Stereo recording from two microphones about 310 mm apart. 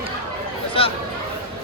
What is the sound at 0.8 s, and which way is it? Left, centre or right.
Chatter, centre.